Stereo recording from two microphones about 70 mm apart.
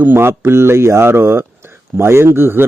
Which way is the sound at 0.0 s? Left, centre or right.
Right.